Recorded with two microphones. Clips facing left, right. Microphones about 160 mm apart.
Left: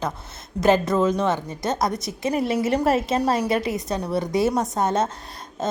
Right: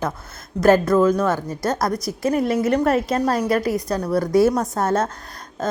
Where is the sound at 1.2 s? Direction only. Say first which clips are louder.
Right 2 dB; 20° left (ahead or behind).